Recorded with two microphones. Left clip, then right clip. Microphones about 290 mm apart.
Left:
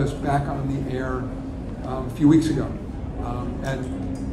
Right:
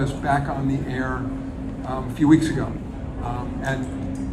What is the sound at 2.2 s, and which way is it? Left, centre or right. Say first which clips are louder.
Speech: right 1 dB; right.